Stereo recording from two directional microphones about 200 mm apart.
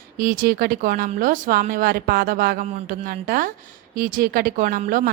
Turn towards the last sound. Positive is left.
turn(degrees=-40)  # may be behind; listen again after turning